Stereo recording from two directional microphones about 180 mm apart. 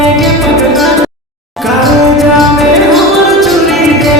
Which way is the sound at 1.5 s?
Centre (ahead or behind).